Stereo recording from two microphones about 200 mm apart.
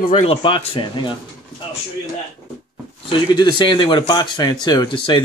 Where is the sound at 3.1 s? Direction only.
20° left (ahead or behind).